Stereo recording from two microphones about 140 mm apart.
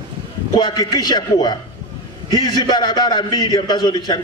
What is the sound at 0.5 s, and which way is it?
A man's voice, 30° left (ahead or behind).